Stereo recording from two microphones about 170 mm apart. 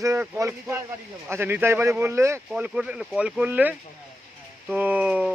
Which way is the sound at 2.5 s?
5° right (ahead or behind).